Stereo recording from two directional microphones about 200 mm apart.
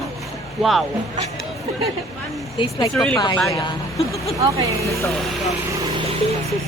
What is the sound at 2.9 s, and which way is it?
Speech, centre (ahead or behind).